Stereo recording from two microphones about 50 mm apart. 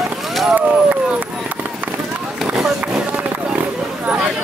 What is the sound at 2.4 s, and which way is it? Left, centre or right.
Run, centre.